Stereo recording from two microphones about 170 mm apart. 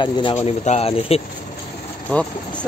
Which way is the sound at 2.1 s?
5° left (ahead or behind).